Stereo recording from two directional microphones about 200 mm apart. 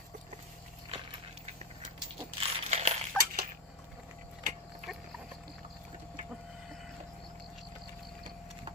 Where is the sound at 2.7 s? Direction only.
35° right (ahead or behind).